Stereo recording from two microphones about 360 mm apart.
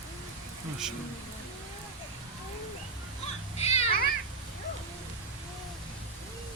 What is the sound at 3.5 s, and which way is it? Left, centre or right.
Children playing, centre.